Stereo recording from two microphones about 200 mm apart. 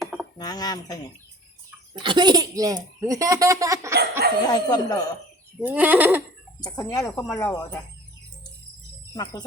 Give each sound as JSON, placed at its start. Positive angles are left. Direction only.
{"t": 0.0, "sound": "a sound", "side_deg": 0}
{"t": 0.3, "sound": "speech", "side_deg": 20}
{"t": 1.9, "sound": "a child's voice", "side_deg": -25}
{"t": 4.4, "sound": "speech", "side_deg": 20}
{"t": 5.5, "sound": "a child's voice", "side_deg": -10}
{"t": 6.6, "sound": "speech", "side_deg": 15}
{"t": 9.1, "sound": "speech", "side_deg": 15}